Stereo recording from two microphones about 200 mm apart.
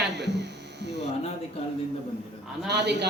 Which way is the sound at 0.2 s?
60° right (ahead or behind).